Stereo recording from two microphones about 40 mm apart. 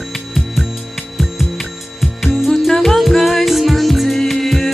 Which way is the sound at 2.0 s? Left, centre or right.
Centre.